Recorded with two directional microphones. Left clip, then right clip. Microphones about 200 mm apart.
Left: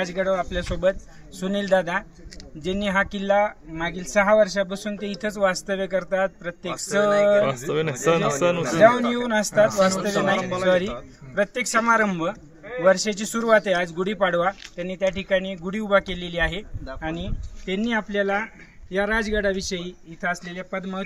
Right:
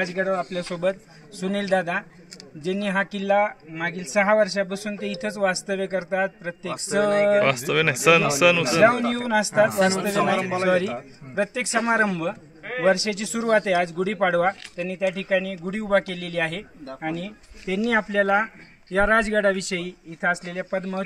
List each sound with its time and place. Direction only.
0.1 s speech: centre (ahead or behind)
11.3 s a man's voice: 5° right (ahead or behind)
17.6 s speech: 50° right (ahead or behind)